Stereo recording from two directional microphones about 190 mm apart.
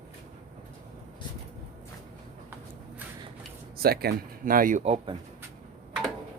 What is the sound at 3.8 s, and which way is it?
Speech, 55° right (ahead or behind).